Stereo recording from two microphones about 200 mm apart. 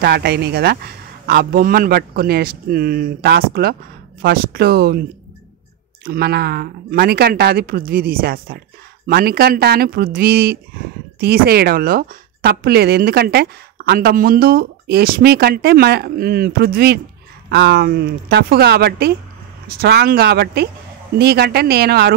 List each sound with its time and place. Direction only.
0.0 s a woman's voice: 55° right (ahead or behind)
6.0 s a woman's voice: 55° right (ahead or behind)